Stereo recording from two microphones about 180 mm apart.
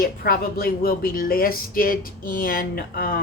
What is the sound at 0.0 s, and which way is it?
Speech, 55° left (ahead or behind).